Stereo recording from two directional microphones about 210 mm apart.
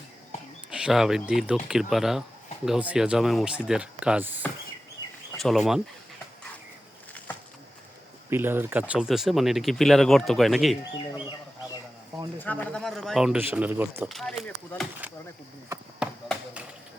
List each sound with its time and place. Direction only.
0.7 s speech: 5° right (ahead or behind)
8.3 s speech: 10° right (ahead or behind)
10.9 s speech: 20° left (ahead or behind)
12.4 s speech: 10° left (ahead or behind)